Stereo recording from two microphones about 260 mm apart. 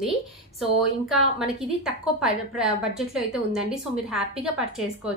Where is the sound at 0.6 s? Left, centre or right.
Centre.